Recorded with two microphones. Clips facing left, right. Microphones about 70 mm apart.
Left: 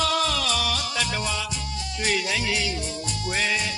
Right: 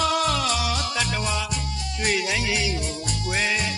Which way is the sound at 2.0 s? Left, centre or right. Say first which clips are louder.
Right 1 dB; centre.